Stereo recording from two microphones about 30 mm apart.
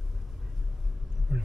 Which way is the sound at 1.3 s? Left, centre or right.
Centre.